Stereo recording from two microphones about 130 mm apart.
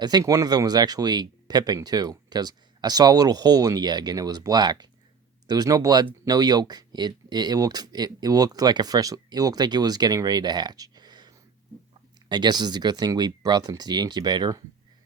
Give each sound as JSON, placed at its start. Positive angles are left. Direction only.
{"t": 0.0, "sound": "speech", "side_deg": -30}